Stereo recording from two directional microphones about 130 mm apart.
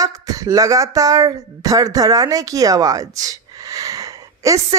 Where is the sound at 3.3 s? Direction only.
25° right (ahead or behind).